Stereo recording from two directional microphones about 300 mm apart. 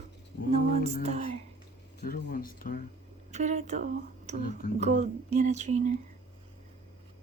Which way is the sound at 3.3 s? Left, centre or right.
Right.